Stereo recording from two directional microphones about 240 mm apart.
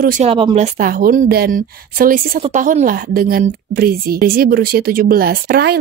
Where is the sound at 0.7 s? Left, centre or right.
Right.